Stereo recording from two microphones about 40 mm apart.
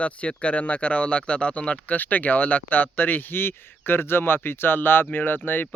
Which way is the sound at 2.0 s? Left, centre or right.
Left.